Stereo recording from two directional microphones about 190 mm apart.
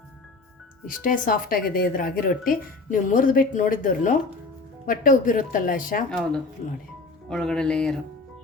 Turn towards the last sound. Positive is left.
turn(degrees=5)  # may be behind; listen again after turning